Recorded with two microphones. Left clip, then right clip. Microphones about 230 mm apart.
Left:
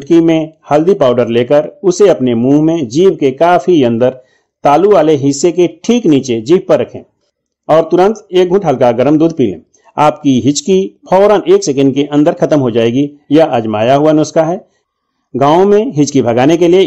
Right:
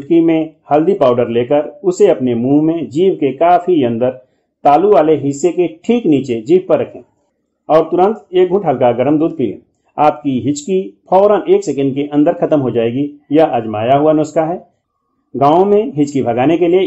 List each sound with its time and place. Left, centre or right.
0.0 s speech: left